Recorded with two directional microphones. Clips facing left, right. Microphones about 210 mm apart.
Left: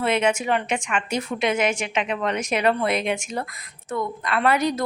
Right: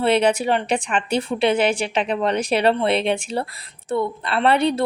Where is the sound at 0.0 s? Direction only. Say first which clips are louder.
Right 4 dB; 35° right (ahead or behind).